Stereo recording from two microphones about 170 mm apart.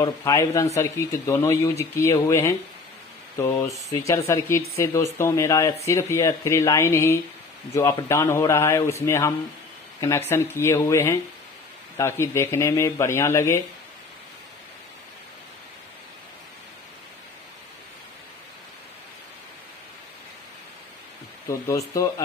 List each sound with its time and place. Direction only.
0.0 s speech: 15° left (ahead or behind)
21.5 s speech: 20° left (ahead or behind)